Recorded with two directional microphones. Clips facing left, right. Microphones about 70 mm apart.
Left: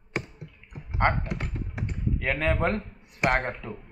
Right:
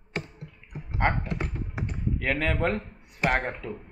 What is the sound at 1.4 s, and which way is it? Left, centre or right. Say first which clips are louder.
Computer keyboard: right 2 dB; centre.